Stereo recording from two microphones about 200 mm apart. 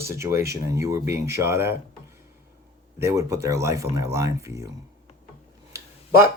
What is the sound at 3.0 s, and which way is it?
Speech, 15° right (ahead or behind).